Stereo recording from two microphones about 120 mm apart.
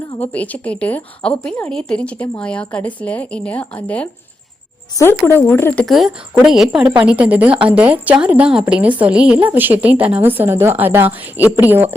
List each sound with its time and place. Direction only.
0.2 s speech: 15° left (ahead or behind)
5.8 s a woman's voice: centre (ahead or behind); by 11.9 s 15° right (ahead or behind)